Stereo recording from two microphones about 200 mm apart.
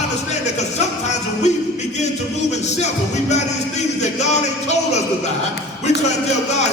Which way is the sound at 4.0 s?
35° left (ahead or behind).